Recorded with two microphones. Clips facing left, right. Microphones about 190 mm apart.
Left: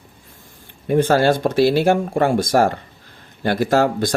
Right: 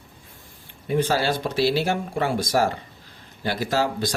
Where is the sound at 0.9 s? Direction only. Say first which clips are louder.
Left 7 dB; 50° left (ahead or behind).